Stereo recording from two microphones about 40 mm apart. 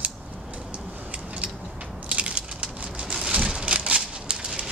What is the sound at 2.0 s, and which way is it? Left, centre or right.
Squish, right.